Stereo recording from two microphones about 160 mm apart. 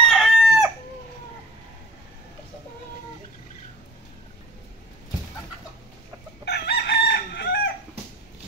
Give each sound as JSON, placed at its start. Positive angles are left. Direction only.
{"t": 0.0, "sound": "chicken", "side_deg": 0}
{"t": 6.4, "sound": "chicken", "side_deg": 90}